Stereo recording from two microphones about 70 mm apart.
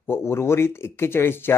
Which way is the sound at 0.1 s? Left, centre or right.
Left.